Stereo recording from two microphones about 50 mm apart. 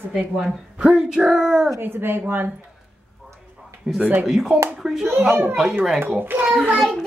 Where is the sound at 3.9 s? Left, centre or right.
Centre.